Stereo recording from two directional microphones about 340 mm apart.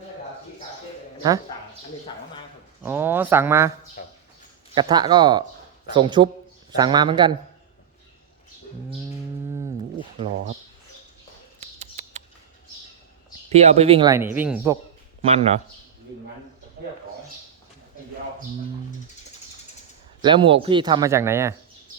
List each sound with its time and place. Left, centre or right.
2.8 s speech: centre
4.0 s a sound: left
4.7 s speech: centre
11.6 s bird: centre
13.5 s speech: centre
15.2 s speech: centre
20.2 s speech: centre